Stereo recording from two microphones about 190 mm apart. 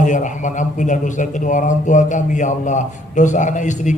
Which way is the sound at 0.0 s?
40° left (ahead or behind).